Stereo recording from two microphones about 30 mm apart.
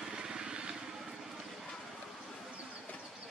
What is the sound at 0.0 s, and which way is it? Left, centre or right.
Vehicle, right.